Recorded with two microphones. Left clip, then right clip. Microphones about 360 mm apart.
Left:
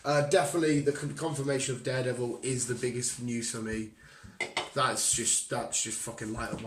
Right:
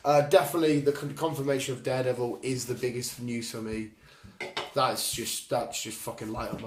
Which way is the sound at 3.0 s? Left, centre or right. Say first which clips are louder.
Even; centre.